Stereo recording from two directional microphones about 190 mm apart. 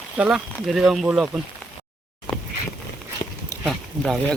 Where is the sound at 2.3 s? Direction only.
25° left (ahead or behind).